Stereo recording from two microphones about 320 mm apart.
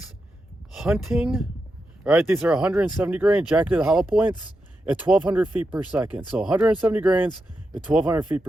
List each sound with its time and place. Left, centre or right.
0.8 s speech: centre